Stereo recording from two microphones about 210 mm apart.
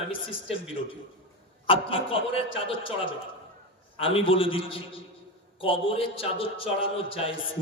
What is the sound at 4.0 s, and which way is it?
A man's voice, 25° left (ahead or behind).